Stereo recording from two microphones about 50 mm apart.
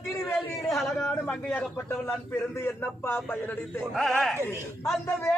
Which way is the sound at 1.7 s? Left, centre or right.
Left.